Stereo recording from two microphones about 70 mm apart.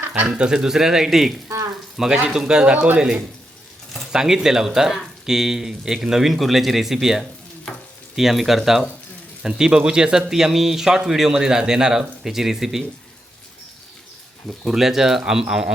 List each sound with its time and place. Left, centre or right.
0.3 s speech: centre
2.7 s speech: right
4.1 s speech: centre
14.7 s speech: centre